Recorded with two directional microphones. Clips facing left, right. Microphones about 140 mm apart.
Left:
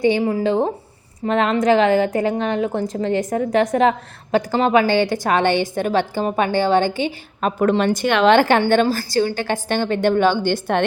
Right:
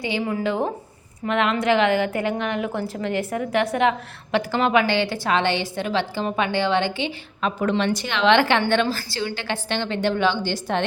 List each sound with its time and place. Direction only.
0.0 s a woman's voice: 45° left (ahead or behind)